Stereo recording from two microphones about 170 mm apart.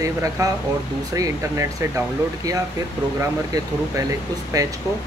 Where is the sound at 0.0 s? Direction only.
20° right (ahead or behind).